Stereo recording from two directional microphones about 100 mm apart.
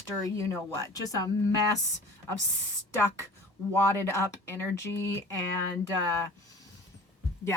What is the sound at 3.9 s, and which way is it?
Speech, 25° left (ahead or behind).